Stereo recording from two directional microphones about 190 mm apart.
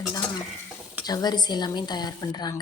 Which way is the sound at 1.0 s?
20° left (ahead or behind).